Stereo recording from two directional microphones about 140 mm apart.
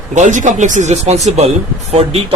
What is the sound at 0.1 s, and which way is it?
A man's voice, 60° right (ahead or behind).